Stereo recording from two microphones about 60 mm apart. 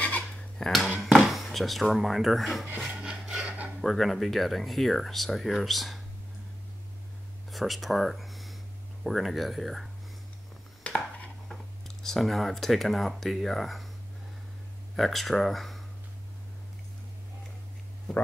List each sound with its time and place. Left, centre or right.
0.6 s speech: centre
3.0 s rub: centre
3.4 s a sound: right
3.8 s speech: centre
7.5 s speech: centre
10.8 s a sound: left
12.0 s speech: centre
15.0 s speech: centre